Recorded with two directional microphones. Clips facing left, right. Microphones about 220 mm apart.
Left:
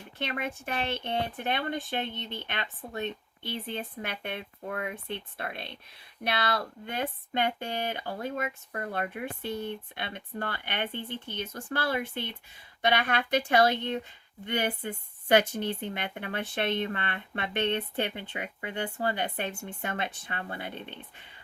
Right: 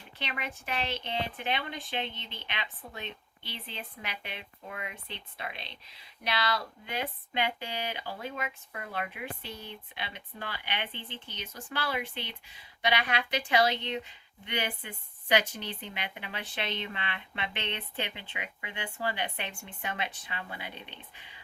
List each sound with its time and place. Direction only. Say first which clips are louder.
0.2 s speech: left 5 dB; 50° left (ahead or behind)